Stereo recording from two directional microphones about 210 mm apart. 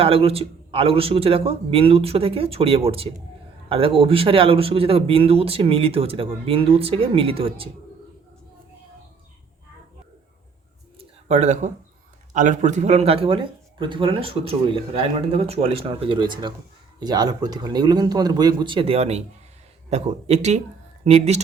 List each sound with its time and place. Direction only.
0.0 s speech: 25° right (ahead or behind)
11.3 s speech: 35° right (ahead or behind)